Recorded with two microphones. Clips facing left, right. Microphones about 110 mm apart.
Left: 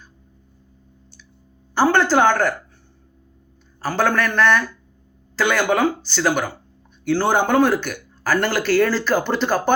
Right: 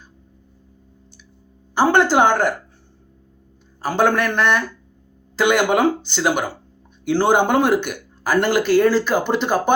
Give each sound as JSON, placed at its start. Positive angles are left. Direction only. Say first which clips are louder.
{"t": 1.7, "sound": "speech", "louder": "right 1 dB", "side_deg": -15}
{"t": 3.8, "sound": "speech", "louder": "right 2 dB", "side_deg": -20}